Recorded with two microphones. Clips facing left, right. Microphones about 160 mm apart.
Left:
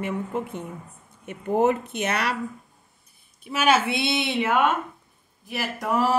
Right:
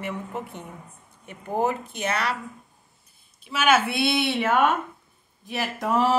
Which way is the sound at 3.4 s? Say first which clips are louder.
Left 1 dB; 45° left (ahead or behind).